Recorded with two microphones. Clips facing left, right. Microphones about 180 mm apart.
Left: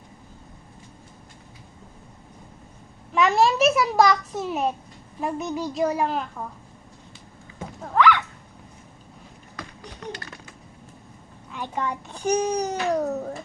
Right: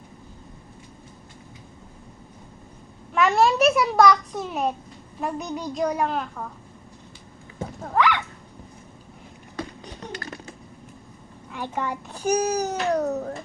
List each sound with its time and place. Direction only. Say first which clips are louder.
3.2 s a child's voice: even; centre (ahead or behind)
7.8 s dog: left 2 dB; 15° right (ahead or behind)
9.6 s a sound: right 7 dB; 25° right (ahead or behind)
11.5 s a child's voice: even; 10° right (ahead or behind)